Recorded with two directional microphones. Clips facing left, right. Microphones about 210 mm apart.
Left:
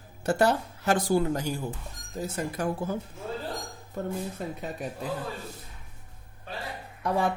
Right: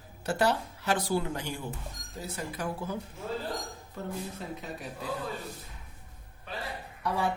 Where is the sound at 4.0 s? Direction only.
50° left (ahead or behind).